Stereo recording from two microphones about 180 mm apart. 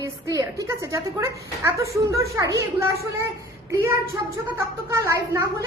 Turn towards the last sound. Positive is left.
turn(degrees=-15)  # may be behind; listen again after turning